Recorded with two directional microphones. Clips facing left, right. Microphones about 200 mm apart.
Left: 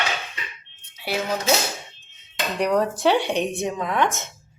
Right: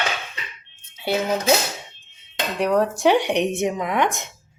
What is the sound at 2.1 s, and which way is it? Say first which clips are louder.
Cutlery: right 1 dB; 5° right (ahead or behind).